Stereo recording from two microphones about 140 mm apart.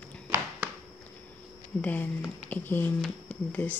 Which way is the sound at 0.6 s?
15° right (ahead or behind).